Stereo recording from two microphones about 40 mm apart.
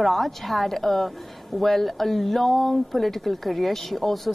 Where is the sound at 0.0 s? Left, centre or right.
Centre.